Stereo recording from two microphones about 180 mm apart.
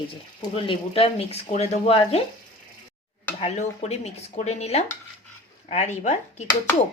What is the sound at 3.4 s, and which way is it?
Speech, 35° left (ahead or behind).